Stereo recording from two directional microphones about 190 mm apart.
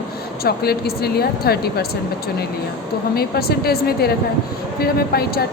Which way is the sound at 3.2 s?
55° left (ahead or behind).